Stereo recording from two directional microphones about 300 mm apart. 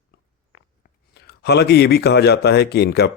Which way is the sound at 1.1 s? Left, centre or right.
Left.